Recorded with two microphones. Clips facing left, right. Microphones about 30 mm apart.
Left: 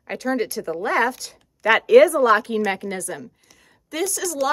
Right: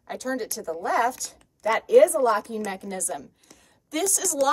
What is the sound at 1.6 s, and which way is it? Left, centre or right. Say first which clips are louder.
Speech: left 4 dB; left.